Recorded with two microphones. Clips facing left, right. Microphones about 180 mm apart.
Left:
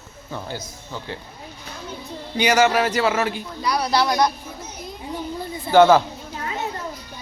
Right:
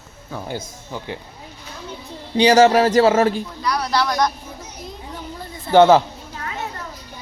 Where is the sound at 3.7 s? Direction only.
20° left (ahead or behind).